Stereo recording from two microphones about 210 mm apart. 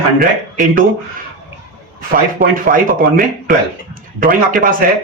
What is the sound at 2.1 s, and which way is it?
A man's voice, 40° right (ahead or behind).